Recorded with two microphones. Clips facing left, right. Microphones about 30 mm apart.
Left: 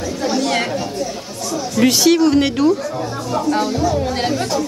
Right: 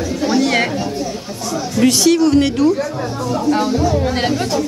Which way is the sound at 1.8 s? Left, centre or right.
Centre.